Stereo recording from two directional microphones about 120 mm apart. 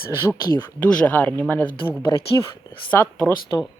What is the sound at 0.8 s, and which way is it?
Speech, 10° left (ahead or behind).